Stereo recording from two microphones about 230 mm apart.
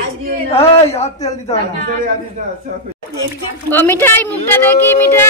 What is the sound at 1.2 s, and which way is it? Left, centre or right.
Speech, centre.